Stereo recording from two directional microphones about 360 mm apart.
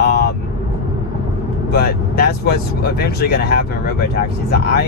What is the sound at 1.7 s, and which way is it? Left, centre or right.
Speech, left.